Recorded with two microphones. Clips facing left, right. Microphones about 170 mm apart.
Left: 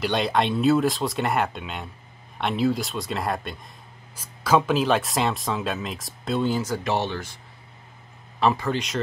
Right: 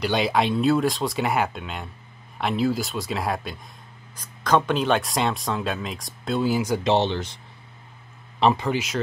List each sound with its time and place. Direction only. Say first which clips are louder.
0.0 s speech: right 1 dB; centre (ahead or behind); by 7.3 s 20° right (ahead or behind)
8.4 s speech: right 2 dB; 20° right (ahead or behind)
8.7 s speech: right 1 dB; centre (ahead or behind)